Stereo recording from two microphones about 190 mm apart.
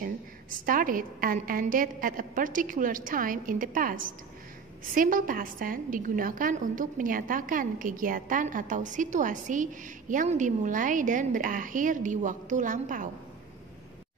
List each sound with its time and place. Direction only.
0.0 s a woman's voice: 45° right (ahead or behind)